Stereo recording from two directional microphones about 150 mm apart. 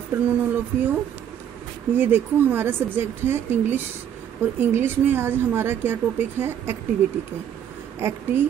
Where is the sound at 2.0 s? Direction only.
15° right (ahead or behind).